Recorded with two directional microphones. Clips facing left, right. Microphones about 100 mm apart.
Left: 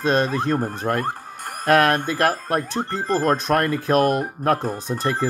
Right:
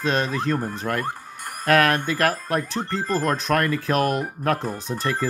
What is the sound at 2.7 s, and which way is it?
Speech, 15° left (ahead or behind).